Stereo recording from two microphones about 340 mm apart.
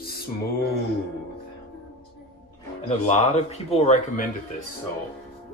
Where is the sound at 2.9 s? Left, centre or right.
Centre.